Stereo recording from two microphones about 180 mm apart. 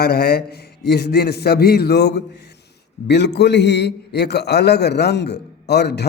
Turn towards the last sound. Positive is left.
turn(degrees=65)  # may be behind; listen again after turning